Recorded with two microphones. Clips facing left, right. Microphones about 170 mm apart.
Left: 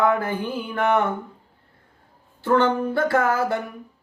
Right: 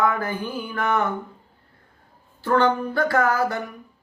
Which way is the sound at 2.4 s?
25° left (ahead or behind).